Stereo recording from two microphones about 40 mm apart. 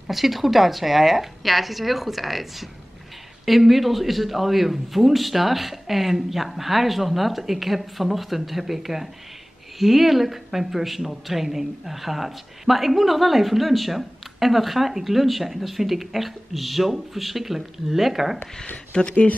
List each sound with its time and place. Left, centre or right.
0.1 s speech: centre
18.9 s speech: left